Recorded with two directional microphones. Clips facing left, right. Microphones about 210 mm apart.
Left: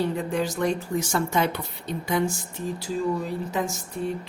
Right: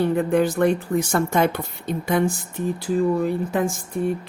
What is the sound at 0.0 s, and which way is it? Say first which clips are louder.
Speech: right 7 dB; 55° right (ahead or behind).